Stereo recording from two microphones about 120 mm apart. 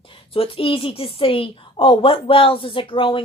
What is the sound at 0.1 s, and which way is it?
A woman's voice, 50° left (ahead or behind).